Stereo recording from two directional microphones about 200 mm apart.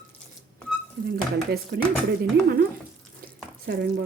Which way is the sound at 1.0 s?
55° right (ahead or behind).